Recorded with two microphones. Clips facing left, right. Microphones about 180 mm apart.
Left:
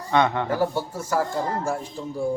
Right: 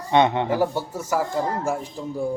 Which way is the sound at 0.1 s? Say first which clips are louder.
Right 3 dB; 20° right (ahead or behind).